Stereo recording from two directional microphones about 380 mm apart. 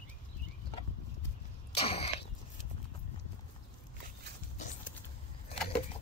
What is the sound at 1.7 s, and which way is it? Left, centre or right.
Throat clearing, centre.